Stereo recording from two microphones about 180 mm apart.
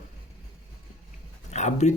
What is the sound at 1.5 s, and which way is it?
Speech, 40° left (ahead or behind).